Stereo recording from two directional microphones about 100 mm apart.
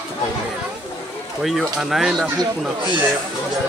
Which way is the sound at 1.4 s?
Centre (ahead or behind).